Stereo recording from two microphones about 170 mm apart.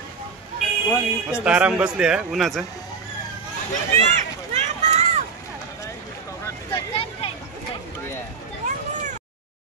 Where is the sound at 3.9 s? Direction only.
45° right (ahead or behind).